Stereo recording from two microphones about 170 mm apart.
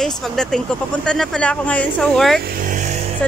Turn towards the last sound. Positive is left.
turn(degrees=-45)  # may be behind; listen again after turning